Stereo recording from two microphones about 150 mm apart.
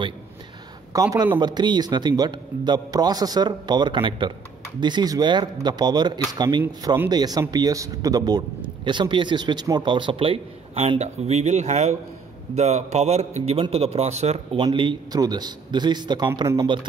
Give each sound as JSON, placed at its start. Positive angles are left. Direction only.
{"t": 0.9, "sound": "a man's voice", "side_deg": -25}
{"t": 14.6, "sound": "speech", "side_deg": -35}